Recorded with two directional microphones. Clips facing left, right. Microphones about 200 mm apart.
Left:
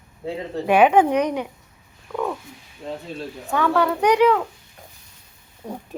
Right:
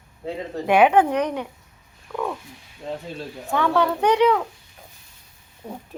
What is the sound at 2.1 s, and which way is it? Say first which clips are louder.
Speech: left 2 dB; 5° left (ahead or behind).